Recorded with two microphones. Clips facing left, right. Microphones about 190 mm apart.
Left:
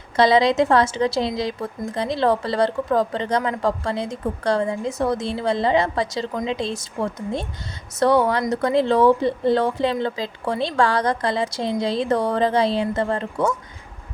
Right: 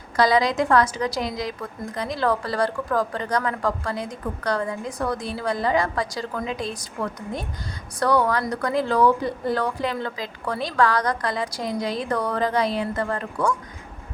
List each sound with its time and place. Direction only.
0.2 s a woman's voice: 25° left (ahead or behind)